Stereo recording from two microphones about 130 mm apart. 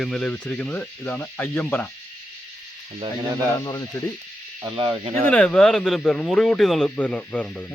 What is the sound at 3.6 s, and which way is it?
Speech, 25° left (ahead or behind).